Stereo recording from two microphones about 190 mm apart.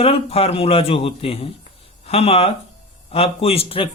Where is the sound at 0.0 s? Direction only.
30° left (ahead or behind).